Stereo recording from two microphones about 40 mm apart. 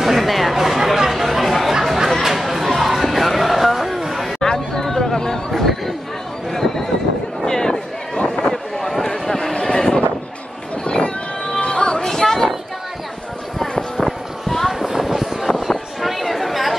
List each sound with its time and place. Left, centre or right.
0.0 s a sound: centre
0.8 s chatter: centre
2.2 s music: centre
4.4 s chatter: centre
5.5 s chatter: centre
6.5 s neigh: centre
7.4 s a sound: centre
10.8 s horse: left
11.6 s music: left
13.9 s a sound: centre
14.7 s vehicle: centre
16.0 s a sound: centre